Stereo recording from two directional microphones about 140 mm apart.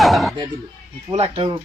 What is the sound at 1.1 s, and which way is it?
Speech, 45° right (ahead or behind).